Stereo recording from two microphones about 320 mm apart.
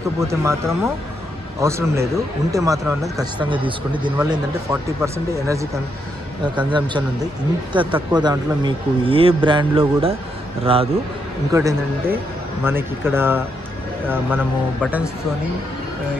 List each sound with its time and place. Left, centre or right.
0.2 s speech: centre
7.7 s speech: centre